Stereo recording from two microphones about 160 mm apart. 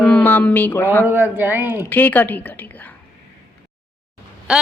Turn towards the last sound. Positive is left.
turn(degrees=-5)  # may be behind; listen again after turning